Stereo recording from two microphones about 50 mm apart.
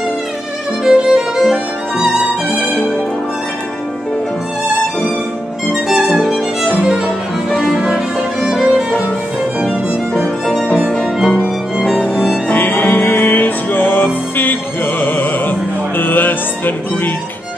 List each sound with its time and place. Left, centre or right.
0.8 s violin: centre
5.9 s music: centre
8.5 s violin: centre
10.2 s music: centre
12.0 s music: right
12.4 s music: left